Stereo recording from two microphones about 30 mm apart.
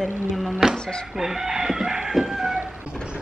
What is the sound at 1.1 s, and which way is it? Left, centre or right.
Chicken, centre.